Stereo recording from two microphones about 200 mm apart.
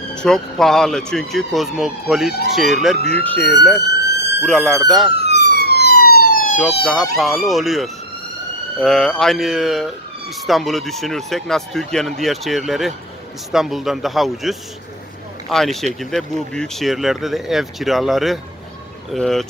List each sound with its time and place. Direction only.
0.1 s speech: 5° left (ahead or behind)
5.2 s police car: 55° left (ahead or behind)
6.8 s speech: centre (ahead or behind)